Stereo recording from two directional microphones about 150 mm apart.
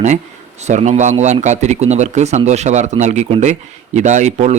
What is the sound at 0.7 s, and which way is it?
Speech, 50° right (ahead or behind).